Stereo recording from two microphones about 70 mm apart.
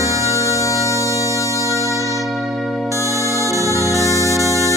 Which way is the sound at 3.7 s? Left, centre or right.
Left.